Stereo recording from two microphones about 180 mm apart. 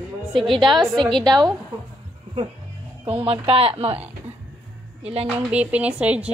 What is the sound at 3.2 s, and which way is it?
Speech, 30° right (ahead or behind).